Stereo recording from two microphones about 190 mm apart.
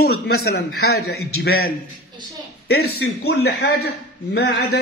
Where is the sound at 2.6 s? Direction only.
60° left (ahead or behind).